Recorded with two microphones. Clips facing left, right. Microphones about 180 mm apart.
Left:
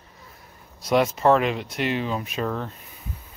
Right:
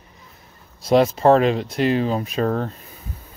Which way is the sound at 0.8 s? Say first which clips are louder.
Right 4 dB; 30° right (ahead or behind).